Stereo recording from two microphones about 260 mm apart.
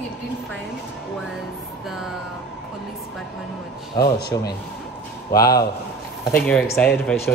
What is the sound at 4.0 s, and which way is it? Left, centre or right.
Speech, left.